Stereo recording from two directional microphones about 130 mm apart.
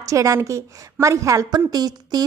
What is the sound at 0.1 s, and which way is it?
A woman's voice, 25° right (ahead or behind).